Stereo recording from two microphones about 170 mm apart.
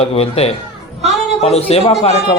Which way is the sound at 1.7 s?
35° left (ahead or behind).